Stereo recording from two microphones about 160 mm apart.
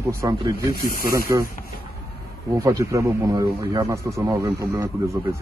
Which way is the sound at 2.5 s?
20° right (ahead or behind).